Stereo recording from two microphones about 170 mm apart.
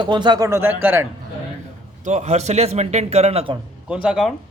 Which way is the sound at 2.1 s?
40° right (ahead or behind).